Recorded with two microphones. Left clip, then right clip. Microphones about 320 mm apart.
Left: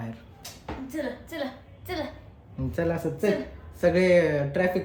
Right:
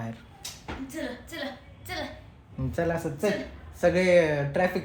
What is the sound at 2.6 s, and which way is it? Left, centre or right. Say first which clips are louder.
Speech: even; centre.